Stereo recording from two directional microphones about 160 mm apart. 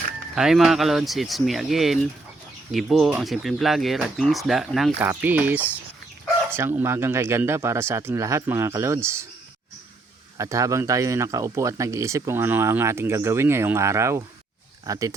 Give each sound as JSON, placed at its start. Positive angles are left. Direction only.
{"t": 0.3, "sound": "speech", "side_deg": 0}
{"t": 10.3, "sound": "speech", "side_deg": -20}